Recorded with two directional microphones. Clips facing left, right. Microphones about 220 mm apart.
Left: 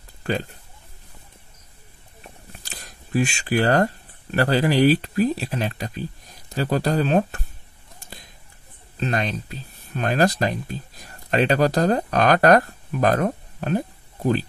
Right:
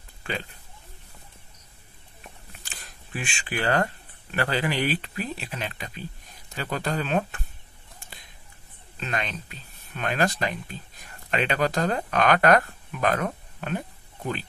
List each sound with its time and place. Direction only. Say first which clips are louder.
2.6 s speech: left 3 dB; 40° left (ahead or behind)
8.0 s a sound: left 6 dB; 40° left (ahead or behind)
9.0 s speech: left 7 dB; 40° left (ahead or behind)